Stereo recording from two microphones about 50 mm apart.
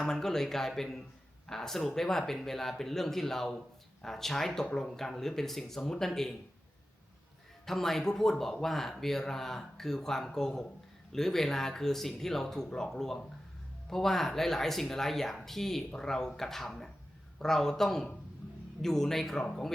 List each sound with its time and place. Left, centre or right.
0.0 s speech: centre
7.6 s speech: centre